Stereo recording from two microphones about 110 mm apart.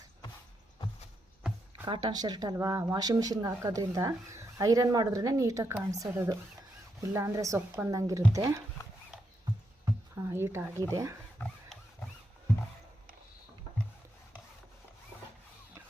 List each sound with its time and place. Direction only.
1.9 s speech: 40° right (ahead or behind)
9.8 s speech: 25° right (ahead or behind)